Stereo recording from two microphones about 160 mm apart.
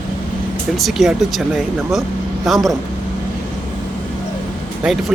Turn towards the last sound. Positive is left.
turn(degrees=-5)  # may be behind; listen again after turning